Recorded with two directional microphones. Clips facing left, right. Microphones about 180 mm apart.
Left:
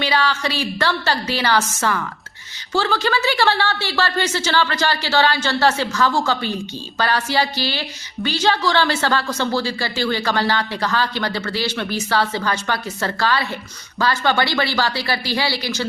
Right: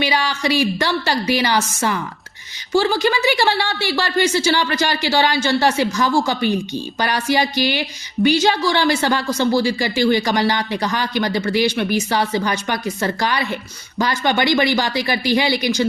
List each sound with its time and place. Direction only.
0.0 s speech: 15° right (ahead or behind)